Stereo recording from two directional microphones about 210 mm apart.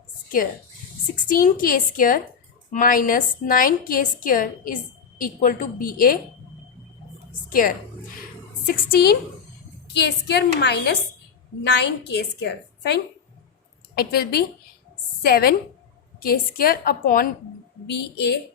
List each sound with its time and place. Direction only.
1.3 s a woman's voice: 40° left (ahead or behind)
7.5 s a woman's voice: 40° left (ahead or behind)
8.6 s a sound: 45° left (ahead or behind)
9.8 s a woman's voice: 55° left (ahead or behind)
12.0 s a woman's voice: 50° left (ahead or behind)